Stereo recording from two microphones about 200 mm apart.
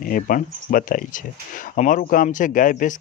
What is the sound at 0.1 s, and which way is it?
Speech, 45° left (ahead or behind).